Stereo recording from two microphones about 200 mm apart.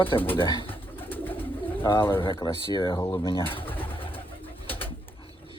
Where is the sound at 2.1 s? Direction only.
25° left (ahead or behind).